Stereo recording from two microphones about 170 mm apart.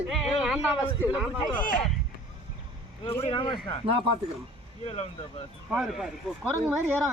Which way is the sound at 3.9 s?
30° right (ahead or behind).